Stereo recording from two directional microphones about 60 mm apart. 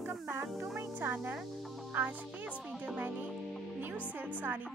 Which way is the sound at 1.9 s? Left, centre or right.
Right.